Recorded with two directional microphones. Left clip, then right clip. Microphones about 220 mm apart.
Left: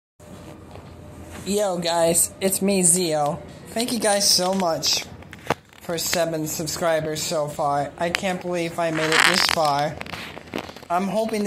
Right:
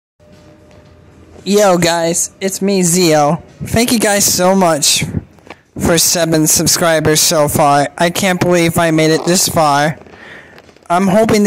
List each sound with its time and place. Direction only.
1.4 s speech: 50° right (ahead or behind)
1.7 s speech: 60° right (ahead or behind)
2.0 s speech: 35° right (ahead or behind)
3.0 s speech: 55° right (ahead or behind)